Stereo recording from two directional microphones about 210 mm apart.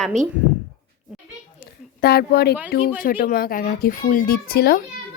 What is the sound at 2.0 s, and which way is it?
Speech, 50° left (ahead or behind).